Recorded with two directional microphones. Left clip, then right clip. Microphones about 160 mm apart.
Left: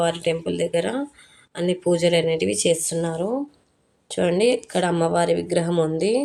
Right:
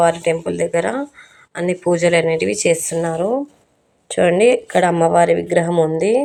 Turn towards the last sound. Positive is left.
turn(degrees=10)  # may be behind; listen again after turning